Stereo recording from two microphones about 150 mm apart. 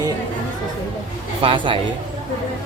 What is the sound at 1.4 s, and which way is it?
Speech, 35° right (ahead or behind).